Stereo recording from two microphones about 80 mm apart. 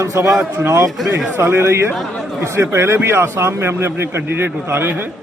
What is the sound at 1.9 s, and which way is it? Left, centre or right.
Speech, centre.